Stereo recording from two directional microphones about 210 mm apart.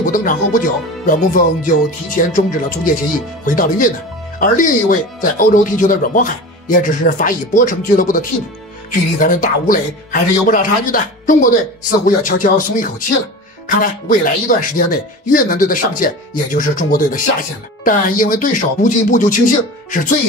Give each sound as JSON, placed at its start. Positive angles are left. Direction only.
{"t": 0.0, "sound": "speech", "side_deg": 40}